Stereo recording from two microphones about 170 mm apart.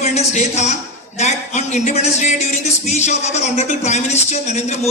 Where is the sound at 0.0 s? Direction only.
40° left (ahead or behind).